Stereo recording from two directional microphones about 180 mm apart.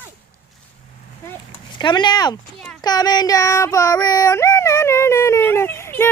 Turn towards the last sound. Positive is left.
turn(degrees=15)  # may be behind; listen again after turning